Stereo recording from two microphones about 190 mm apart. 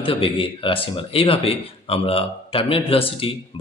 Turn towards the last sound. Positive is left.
turn(degrees=30)  # may be behind; listen again after turning